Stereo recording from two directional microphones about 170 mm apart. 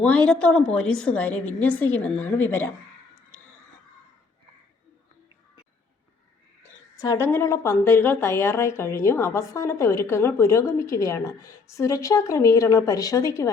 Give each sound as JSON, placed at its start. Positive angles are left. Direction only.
{"t": 0.0, "sound": "a woman's voice", "side_deg": 5}
{"t": 6.9, "sound": "a woman's voice", "side_deg": 20}